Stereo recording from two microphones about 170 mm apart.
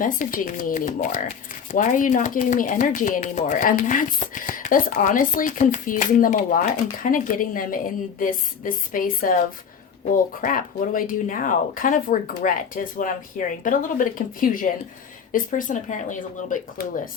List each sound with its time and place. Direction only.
0.0 s speech: 50° left (ahead or behind)